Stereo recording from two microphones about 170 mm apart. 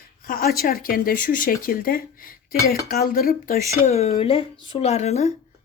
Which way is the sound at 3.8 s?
40° left (ahead or behind).